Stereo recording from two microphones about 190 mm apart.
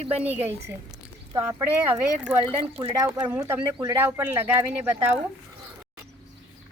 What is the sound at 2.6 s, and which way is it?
Speech, 25° right (ahead or behind).